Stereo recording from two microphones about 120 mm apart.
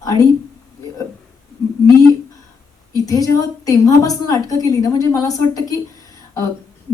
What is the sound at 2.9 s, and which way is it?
Speech, 30° left (ahead or behind).